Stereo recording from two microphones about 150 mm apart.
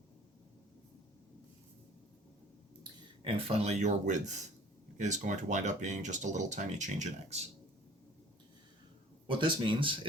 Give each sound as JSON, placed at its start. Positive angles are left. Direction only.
{"t": 3.2, "sound": "speech", "side_deg": -40}
{"t": 9.2, "sound": "speech", "side_deg": -35}